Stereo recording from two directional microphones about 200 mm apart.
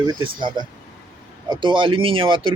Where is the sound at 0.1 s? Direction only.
25° right (ahead or behind).